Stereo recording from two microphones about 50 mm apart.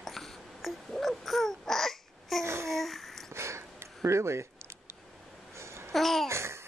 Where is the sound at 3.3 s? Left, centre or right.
Right.